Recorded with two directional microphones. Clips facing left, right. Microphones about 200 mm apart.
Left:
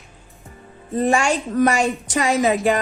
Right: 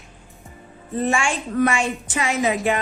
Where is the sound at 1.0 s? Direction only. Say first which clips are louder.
Left 4 dB; 40° left (ahead or behind).